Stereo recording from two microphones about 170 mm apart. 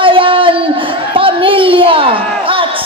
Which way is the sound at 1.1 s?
30° right (ahead or behind).